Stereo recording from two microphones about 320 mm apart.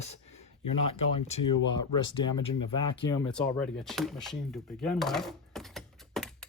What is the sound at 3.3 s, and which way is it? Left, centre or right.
Speech, centre.